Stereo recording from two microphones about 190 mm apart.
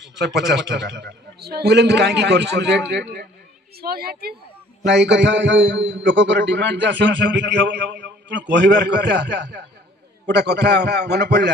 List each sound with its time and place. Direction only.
0.0 s a man's voice: 65° right (ahead or behind)
3.7 s a woman's voice: 55° right (ahead or behind)
4.8 s a man's voice: 65° right (ahead or behind)